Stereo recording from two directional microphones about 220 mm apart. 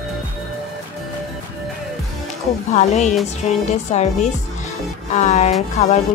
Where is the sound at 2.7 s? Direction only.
30° left (ahead or behind).